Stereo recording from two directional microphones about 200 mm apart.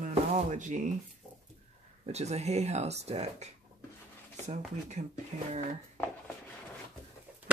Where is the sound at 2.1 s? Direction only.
30° right (ahead or behind).